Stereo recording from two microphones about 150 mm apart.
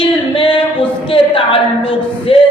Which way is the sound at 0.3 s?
35° left (ahead or behind).